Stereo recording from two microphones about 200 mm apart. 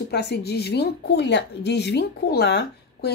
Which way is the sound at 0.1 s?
55° left (ahead or behind).